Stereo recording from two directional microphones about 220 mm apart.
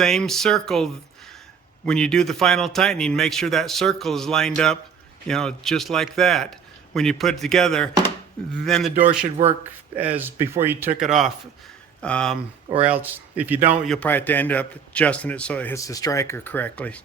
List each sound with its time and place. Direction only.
0.0 s a man's voice: centre (ahead or behind)
9.4 s speech: 30° right (ahead or behind)
9.9 s a man's voice: 5° right (ahead or behind)
12.8 s a man's voice: 5° right (ahead or behind)